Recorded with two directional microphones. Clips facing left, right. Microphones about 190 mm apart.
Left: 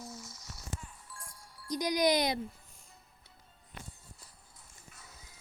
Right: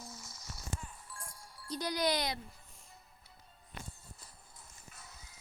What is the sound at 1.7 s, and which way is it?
Speech, 15° left (ahead or behind).